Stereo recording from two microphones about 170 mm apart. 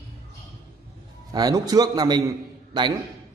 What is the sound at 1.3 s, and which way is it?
Speech, 20° right (ahead or behind).